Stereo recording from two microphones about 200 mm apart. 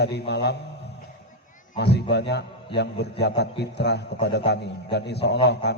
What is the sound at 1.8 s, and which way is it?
A man's voice, 55° left (ahead or behind).